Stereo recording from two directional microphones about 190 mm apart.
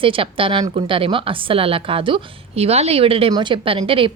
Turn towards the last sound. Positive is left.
turn(degrees=-25)  # may be behind; listen again after turning